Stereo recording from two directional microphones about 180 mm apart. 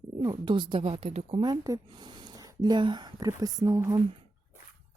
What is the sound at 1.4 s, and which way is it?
Speech, 20° right (ahead or behind).